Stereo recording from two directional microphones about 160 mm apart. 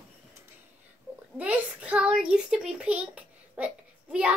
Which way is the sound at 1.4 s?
10° right (ahead or behind).